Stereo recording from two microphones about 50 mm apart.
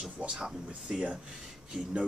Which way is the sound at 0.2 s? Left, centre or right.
Centre.